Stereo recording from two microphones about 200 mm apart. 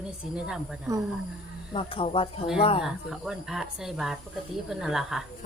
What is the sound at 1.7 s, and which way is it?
Speech, 25° left (ahead or behind).